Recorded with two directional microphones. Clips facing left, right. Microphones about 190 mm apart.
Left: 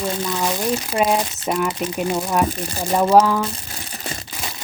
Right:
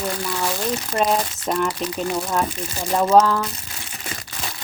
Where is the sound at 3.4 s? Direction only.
35° left (ahead or behind).